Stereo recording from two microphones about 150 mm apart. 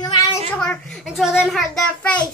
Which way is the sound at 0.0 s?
40° left (ahead or behind).